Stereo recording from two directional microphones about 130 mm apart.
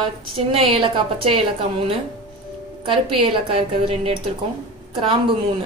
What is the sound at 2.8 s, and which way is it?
A woman's voice, 45° right (ahead or behind).